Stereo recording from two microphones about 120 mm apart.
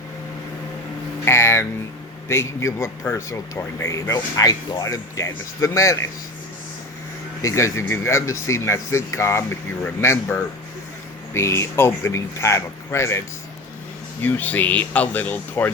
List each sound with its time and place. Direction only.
1.2 s a sound: 20° left (ahead or behind)
2.3 s speech: 20° left (ahead or behind)
7.4 s speech: 25° left (ahead or behind)